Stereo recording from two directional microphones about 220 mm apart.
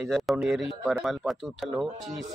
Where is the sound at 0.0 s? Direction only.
Centre (ahead or behind).